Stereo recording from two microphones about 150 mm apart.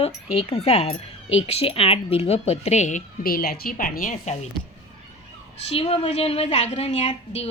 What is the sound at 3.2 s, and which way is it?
A woman's voice, 80° left.